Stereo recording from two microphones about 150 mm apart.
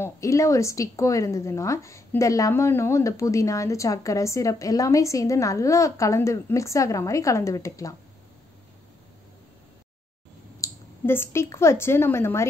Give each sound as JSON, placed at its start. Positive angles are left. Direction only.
{"t": 0.0, "sound": "a woman's voice", "side_deg": 20}
{"t": 10.6, "sound": "speech", "side_deg": 15}